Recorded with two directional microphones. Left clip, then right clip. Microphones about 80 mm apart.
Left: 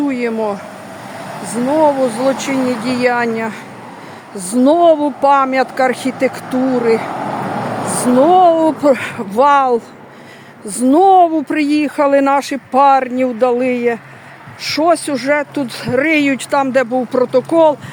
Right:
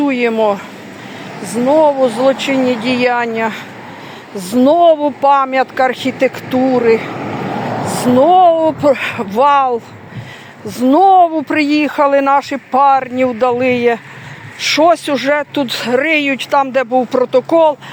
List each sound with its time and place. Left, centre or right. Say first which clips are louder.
0.1 s speech: right 5 dB; centre
1.3 s speech: right 4 dB; left
2.6 s speech: right 3 dB; right
2.8 s speech: right 1 dB; left
4.4 s speech: right 1 dB; left
4.8 s speech: right 1 dB; left
7.2 s vehicle: left 2 dB; centre
7.4 s vehicle: even; centre
8.2 s speech: right 1 dB; left
13.7 s speech: right 3 dB; centre
16.0 s speech: even; left
16.4 s speech: right 1 dB; left
17.1 s speech: right 2 dB; left